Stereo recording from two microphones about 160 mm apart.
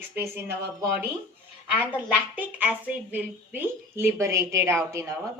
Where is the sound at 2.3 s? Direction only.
10° right (ahead or behind).